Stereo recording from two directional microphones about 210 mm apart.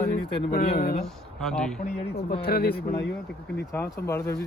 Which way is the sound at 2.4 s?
50° left (ahead or behind).